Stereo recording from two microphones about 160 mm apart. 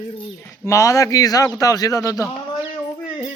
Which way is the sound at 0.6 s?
20° left (ahead or behind).